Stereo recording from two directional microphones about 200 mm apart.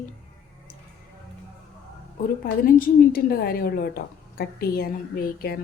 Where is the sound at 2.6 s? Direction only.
45° left (ahead or behind).